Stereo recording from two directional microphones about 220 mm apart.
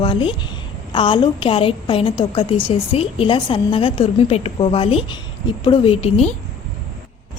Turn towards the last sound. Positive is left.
turn(degrees=30)  # may be behind; listen again after turning